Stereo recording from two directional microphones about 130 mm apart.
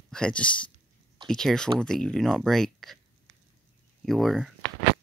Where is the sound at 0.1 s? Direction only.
5° left (ahead or behind).